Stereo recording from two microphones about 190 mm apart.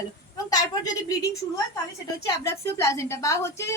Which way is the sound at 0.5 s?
20° left (ahead or behind).